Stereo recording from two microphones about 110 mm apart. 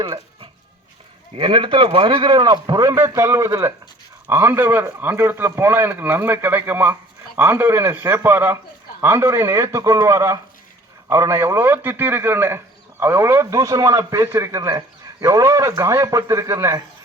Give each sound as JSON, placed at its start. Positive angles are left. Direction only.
{"t": 1.4, "sound": "a man's voice", "side_deg": -50}
{"t": 2.9, "sound": "a man's voice", "side_deg": -25}